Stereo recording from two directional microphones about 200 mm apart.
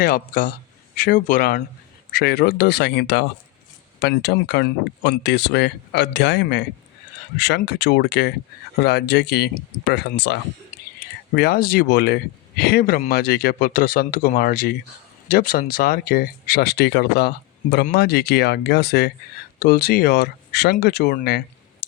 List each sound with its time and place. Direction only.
0.0 s speech: 45° left (ahead or behind)
11.3 s speech: 50° left (ahead or behind)